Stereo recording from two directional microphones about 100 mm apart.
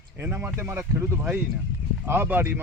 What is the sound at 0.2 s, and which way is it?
Speech, 25° right (ahead or behind).